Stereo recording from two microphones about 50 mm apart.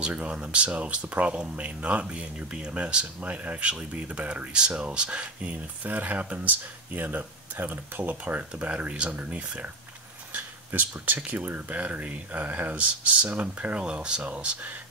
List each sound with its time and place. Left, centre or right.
0.0 s speech: right
10.3 s a sound: right
11.1 s speech: right
13.7 s speech: centre